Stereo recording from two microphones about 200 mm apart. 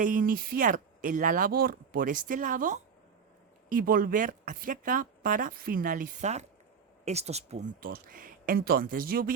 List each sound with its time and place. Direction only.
0.0 s speech: 45° right (ahead or behind)
7.8 s speech: 45° right (ahead or behind)